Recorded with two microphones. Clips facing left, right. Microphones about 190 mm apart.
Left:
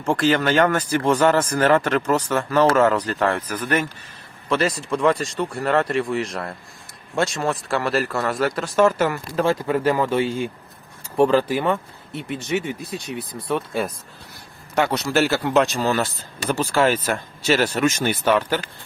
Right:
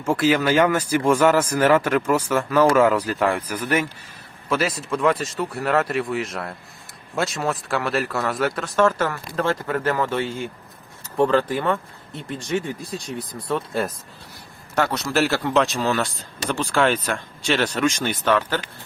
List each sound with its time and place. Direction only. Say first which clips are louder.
0.0 s speech: even; 5° right (ahead or behind); by 11.8 s 10° left (ahead or behind)
12.5 s speech: even; 65° left (ahead or behind)
13.1 s speech: left 1 dB; centre (ahead or behind)